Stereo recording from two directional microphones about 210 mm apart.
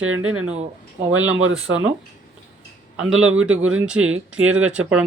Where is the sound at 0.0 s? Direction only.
75° right (ahead or behind).